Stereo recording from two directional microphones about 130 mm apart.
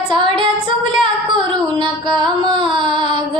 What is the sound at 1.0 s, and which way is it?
Music, 40° right (ahead or behind).